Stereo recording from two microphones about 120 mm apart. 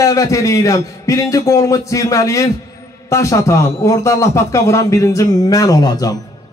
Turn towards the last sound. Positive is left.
turn(degrees=30)  # may be behind; listen again after turning